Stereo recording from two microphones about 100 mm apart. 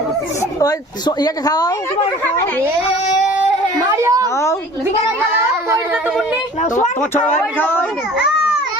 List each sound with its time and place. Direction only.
0.6 s speech: 40° left (ahead or behind)
3.9 s a child's voice: 30° right (ahead or behind)
7.0 s speech: 20° left (ahead or behind)